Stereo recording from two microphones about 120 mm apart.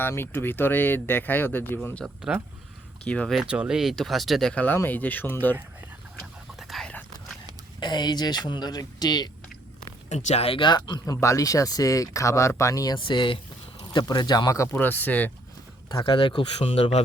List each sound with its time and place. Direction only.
0.0 s speech: 20° left (ahead or behind)
3.0 s speech: 5° left (ahead or behind)
3.3 s speech: 10° right (ahead or behind); by 5.5 s 15° left (ahead or behind)
6.6 s whispering: centre (ahead or behind)
7.8 s speech: 40° left (ahead or behind)
10.1 s speech: 70° left (ahead or behind); by 11.0 s 40° left (ahead or behind)
11.0 s speech: 25° left (ahead or behind)
13.1 s speech: 45° left (ahead or behind); by 15.3 s 15° left (ahead or behind)
16.0 s speech: 45° left (ahead or behind)
16.6 s speech: 55° left (ahead or behind)